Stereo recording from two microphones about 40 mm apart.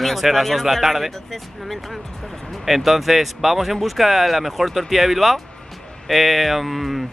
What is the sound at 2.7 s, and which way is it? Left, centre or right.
Speech, centre.